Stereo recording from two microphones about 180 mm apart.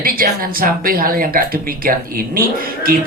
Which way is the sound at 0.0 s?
55° right (ahead or behind).